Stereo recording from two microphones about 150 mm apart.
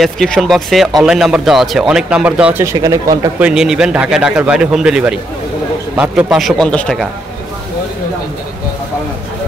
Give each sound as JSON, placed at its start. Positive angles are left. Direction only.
{"t": 0.0, "sound": "a man's voice", "side_deg": 0}
{"t": 2.6, "sound": "speech", "side_deg": -20}
{"t": 3.3, "sound": "a man's voice", "side_deg": -5}